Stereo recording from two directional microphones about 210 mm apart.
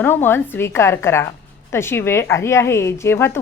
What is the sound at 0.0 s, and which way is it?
A woman's voice, 10° left (ahead or behind).